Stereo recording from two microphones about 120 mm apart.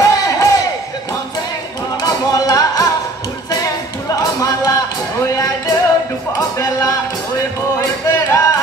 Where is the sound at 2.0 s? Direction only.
30° left (ahead or behind).